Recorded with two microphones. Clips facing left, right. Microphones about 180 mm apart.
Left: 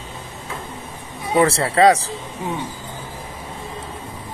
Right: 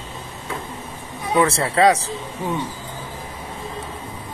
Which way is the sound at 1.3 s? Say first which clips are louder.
Left 2 dB; 30° left (ahead or behind).